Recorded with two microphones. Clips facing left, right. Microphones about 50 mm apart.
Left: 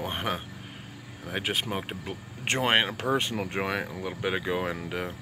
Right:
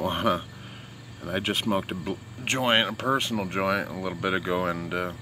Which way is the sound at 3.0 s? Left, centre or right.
Centre.